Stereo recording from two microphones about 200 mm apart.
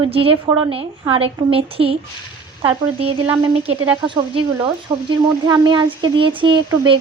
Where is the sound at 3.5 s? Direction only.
30° right (ahead or behind).